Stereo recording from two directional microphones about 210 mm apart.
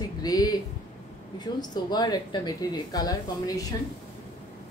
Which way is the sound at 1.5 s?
20° left (ahead or behind).